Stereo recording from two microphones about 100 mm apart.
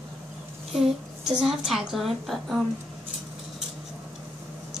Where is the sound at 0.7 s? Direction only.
5° right (ahead or behind).